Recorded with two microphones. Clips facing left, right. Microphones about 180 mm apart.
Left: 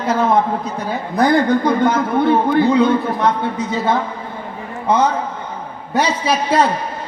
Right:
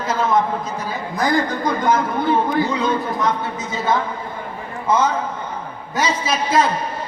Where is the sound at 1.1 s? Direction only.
60° left (ahead or behind).